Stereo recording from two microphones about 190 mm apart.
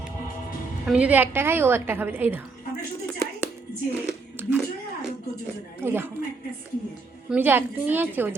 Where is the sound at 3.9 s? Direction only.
10° right (ahead or behind).